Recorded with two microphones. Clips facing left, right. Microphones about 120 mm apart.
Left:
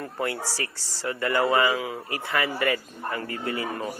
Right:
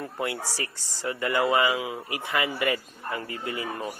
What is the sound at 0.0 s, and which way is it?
A man's voice, 15° right (ahead or behind).